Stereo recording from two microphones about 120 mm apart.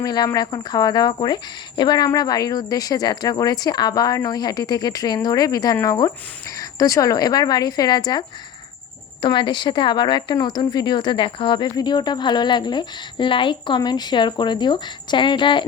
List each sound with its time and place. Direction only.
0.0 s speech: 35° left (ahead or behind)
9.2 s speech: 40° left (ahead or behind)